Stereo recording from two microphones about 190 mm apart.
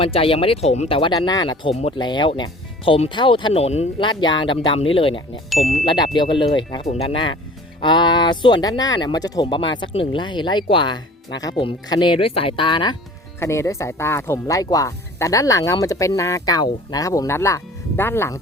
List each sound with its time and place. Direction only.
0.0 s speech: 30° left (ahead or behind); by 18.3 s 15° left (ahead or behind)